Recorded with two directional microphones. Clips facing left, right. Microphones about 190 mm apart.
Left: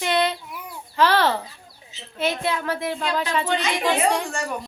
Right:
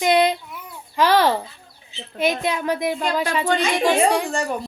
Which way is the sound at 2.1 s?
15° right (ahead or behind).